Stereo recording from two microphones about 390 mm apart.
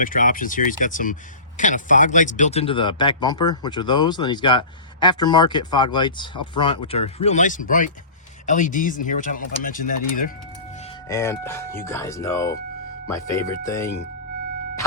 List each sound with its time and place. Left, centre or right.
0.0 s speech: left
11.1 s speech: centre